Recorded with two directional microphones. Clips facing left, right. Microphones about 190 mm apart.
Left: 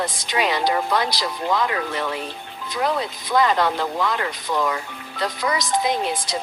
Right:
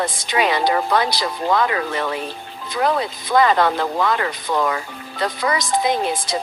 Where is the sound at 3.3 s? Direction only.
60° right (ahead or behind).